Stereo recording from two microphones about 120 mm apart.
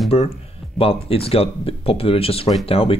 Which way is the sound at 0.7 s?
50° left (ahead or behind).